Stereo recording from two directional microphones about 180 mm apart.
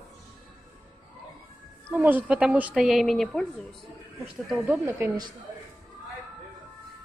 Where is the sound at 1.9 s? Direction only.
10° right (ahead or behind).